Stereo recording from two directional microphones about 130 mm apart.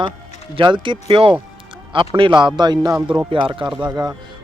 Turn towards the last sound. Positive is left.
turn(degrees=-30)  # may be behind; listen again after turning